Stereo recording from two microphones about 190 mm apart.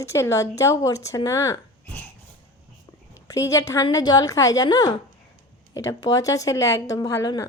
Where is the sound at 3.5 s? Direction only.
15° left (ahead or behind).